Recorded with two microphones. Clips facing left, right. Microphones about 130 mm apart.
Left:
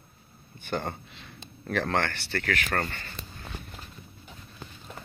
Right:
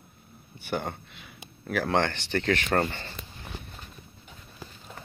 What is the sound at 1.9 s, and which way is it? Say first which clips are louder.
Speech: right 3 dB; 15° right (ahead or behind).